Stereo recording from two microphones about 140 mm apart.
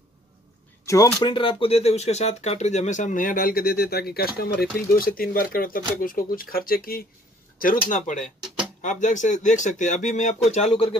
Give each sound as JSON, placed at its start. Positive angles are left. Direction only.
{"t": 0.8, "sound": "speech", "side_deg": 20}
{"t": 1.2, "sound": "speech", "side_deg": 35}
{"t": 7.5, "sound": "speech", "side_deg": 80}